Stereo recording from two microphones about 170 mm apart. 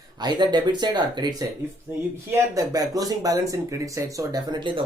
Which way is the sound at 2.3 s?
20° right (ahead or behind).